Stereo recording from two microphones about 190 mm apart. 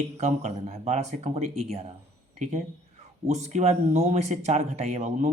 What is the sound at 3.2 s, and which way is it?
Speech, 35° right (ahead or behind).